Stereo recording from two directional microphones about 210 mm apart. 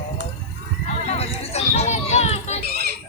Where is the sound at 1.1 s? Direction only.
30° left (ahead or behind).